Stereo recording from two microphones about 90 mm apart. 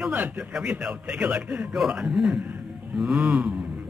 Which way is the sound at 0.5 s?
10° right (ahead or behind).